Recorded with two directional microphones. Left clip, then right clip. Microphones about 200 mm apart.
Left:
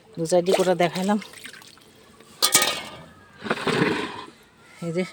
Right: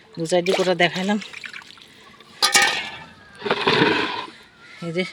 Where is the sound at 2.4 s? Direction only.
55° left (ahead or behind).